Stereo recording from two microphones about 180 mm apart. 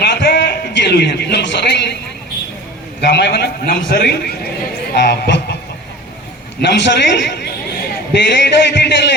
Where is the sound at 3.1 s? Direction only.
65° left (ahead or behind).